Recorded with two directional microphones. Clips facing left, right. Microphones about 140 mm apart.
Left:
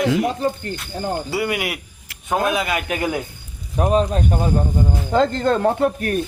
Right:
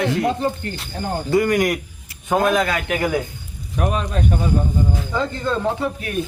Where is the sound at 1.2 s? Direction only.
10° left (ahead or behind).